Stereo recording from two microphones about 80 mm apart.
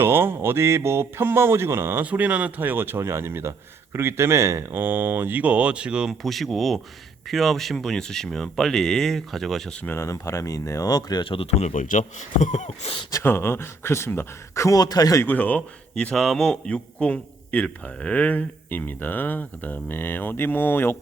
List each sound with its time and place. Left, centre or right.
0.0 s speech: right
2.0 s speech: centre
6.2 s speech: centre
9.9 s speech: left
13.2 s speech: left
15.2 s a man's voice: left
16.1 s a man's voice: centre; by 20.9 s left